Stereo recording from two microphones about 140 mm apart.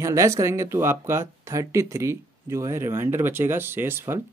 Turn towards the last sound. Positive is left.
turn(degrees=-15)  # may be behind; listen again after turning